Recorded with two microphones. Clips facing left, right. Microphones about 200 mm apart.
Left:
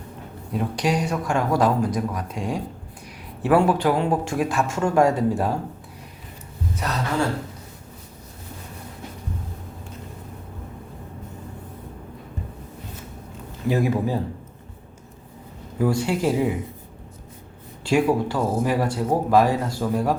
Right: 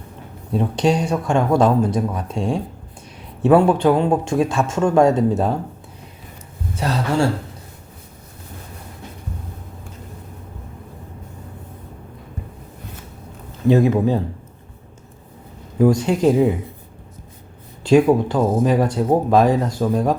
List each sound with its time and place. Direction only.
0.5 s speech: 25° right (ahead or behind)
6.7 s speech: 30° right (ahead or behind)
13.7 s speech: 25° right (ahead or behind)
15.8 s speech: 20° right (ahead or behind)
17.8 s speech: 20° right (ahead or behind)